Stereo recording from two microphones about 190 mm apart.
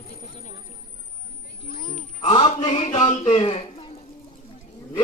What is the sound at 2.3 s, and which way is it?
Speech, 25° left (ahead or behind).